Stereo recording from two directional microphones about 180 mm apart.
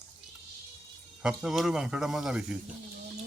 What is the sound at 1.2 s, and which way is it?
Speech, centre (ahead or behind).